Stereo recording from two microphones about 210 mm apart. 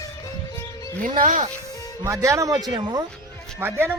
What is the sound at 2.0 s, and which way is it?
A man's voice, 15° right (ahead or behind).